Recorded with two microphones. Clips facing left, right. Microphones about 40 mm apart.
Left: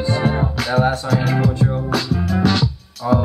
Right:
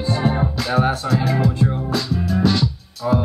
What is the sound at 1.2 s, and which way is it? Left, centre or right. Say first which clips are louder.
Music: left 1 dB; left.